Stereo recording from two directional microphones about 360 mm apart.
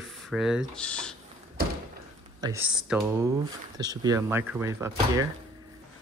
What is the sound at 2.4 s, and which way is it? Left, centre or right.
Speech, centre.